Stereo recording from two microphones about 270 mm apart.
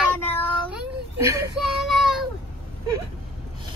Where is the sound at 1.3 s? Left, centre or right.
Centre.